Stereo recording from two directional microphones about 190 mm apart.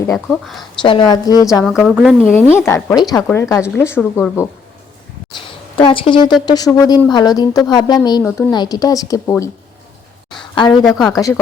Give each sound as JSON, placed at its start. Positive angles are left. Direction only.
{"t": 0.1, "sound": "a woman's voice", "side_deg": 0}
{"t": 0.8, "sound": "a woman's voice", "side_deg": 25}
{"t": 1.6, "sound": "a woman's voice", "side_deg": 0}
{"t": 2.3, "sound": "a woman's voice", "side_deg": 10}
{"t": 5.4, "sound": "a sound", "side_deg": 25}
{"t": 6.4, "sound": "a woman's voice", "side_deg": 20}
{"t": 10.7, "sound": "a woman's voice", "side_deg": 0}
{"t": 11.0, "sound": "a woman's voice", "side_deg": 15}